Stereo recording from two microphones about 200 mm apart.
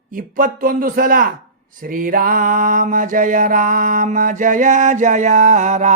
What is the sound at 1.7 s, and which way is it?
Mantra, 45° right (ahead or behind).